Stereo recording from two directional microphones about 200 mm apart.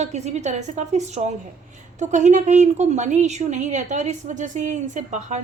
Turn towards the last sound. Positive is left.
turn(degrees=-35)  # may be behind; listen again after turning